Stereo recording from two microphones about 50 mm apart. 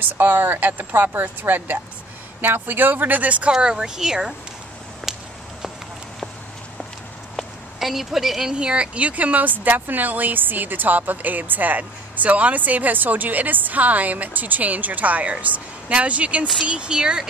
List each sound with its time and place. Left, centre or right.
0.2 s a woman's voice: right
3.5 s speech: centre
5.0 s a sound: centre
7.8 s a woman's voice: centre